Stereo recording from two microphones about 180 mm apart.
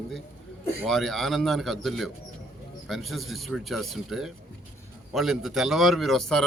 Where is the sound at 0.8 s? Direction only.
Centre (ahead or behind).